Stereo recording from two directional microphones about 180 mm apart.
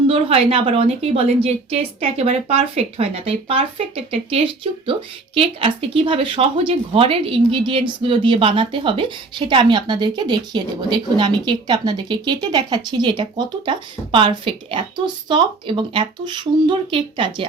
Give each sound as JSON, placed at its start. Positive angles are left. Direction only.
{"t": 0.1, "sound": "a woman's voice", "side_deg": -30}